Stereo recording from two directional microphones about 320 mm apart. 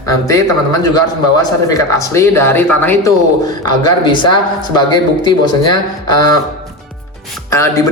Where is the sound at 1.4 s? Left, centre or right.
Centre.